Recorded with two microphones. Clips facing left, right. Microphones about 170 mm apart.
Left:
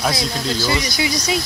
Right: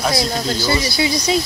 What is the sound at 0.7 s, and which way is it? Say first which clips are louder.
Speech: right 5 dB; 30° right (ahead or behind).